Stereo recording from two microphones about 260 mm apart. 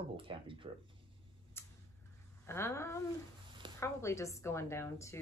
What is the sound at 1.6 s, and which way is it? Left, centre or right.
Tick-tock, centre.